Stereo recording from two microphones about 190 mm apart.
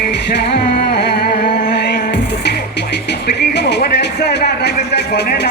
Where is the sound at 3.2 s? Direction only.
60° left (ahead or behind).